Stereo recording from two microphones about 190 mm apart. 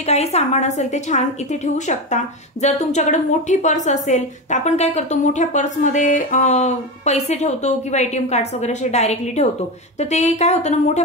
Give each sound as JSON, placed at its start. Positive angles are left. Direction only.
{"t": 0.0, "sound": "a woman's voice", "side_deg": 35}